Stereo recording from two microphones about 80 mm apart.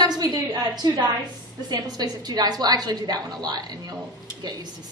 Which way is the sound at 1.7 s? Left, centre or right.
Right.